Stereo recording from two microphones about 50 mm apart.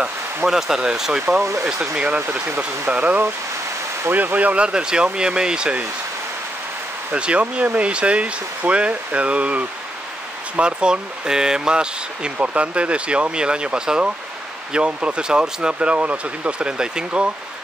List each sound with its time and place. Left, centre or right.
0.5 s speech: centre
1.6 s speech: right
2.4 s speech: right
2.9 s speech: right
7.2 s speech: right